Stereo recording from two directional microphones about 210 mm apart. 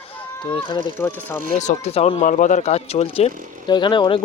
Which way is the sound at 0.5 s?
25° left (ahead or behind).